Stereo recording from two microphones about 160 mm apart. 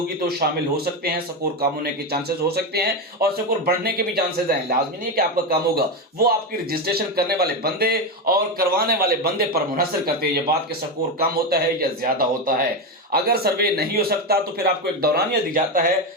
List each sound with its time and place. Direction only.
2.7 s speech: 75° right (ahead or behind)